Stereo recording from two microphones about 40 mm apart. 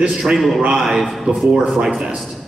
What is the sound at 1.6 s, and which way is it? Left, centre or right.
Speech, right.